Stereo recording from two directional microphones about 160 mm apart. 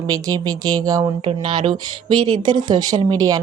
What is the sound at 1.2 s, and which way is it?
A woman's voice, 35° right (ahead or behind).